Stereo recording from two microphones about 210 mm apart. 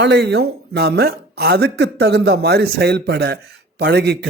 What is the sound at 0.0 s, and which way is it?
Speech, 55° right (ahead or behind).